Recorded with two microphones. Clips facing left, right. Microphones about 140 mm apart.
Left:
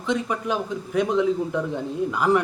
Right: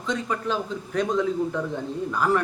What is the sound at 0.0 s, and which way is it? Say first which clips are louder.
A man's voice: left 2 dB; 10° left (ahead or behind).